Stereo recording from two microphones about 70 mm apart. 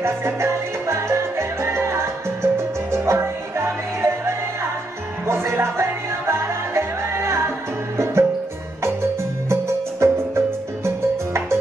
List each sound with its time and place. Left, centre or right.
0.0 s salsa music: right
1.6 s music: right
5.2 s music: right
9.5 s music: right